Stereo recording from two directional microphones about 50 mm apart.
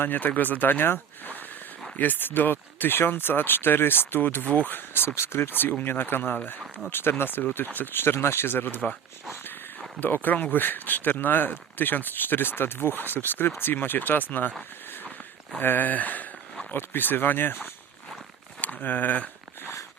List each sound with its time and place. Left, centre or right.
0.0 s speech: left
5.1 s speech: left
10.0 s speech: left
15.6 s a sound: left
16.9 s speech: left
18.6 s speech: left